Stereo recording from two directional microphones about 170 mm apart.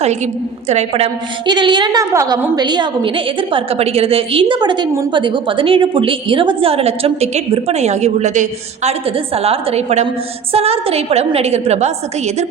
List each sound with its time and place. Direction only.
0.7 s a woman's voice: 40° right (ahead or behind)
1.5 s a woman's voice: 25° right (ahead or behind)